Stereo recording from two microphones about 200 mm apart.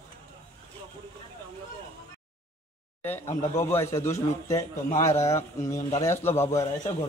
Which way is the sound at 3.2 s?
35° left (ahead or behind).